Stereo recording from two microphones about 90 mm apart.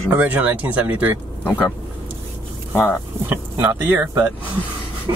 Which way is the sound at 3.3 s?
20° right (ahead or behind).